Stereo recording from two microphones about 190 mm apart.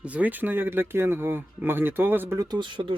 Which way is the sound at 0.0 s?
5° right (ahead or behind).